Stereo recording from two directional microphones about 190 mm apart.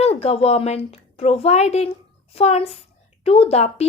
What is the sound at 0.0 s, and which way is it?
A woman's voice, 35° left (ahead or behind).